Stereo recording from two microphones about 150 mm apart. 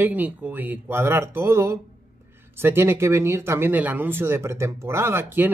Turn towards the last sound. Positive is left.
turn(degrees=-15)  # may be behind; listen again after turning